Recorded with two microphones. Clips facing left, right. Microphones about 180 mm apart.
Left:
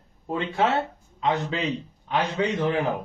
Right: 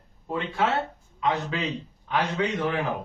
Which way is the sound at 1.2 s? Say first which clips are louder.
Left 2 dB; 25° left (ahead or behind).